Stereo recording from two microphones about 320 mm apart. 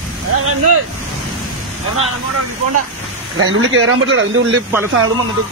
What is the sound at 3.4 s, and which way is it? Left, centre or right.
Speech, right.